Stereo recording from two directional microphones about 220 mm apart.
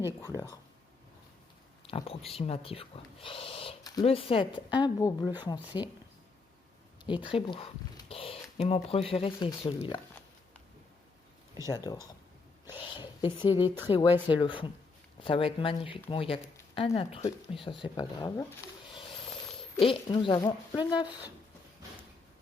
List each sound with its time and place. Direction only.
1.9 s speech: 25° left (ahead or behind)
7.1 s speech: 25° left (ahead or behind)
11.7 s speech: 20° left (ahead or behind)
19.2 s a sound: 25° left (ahead or behind)
19.8 s speech: 25° left (ahead or behind)